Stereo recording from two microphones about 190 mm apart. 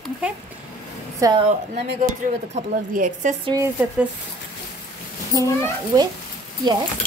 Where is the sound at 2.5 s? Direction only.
40° right (ahead or behind).